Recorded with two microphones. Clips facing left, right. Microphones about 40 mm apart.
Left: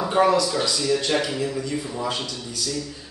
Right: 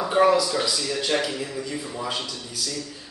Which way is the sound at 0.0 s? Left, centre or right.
Centre.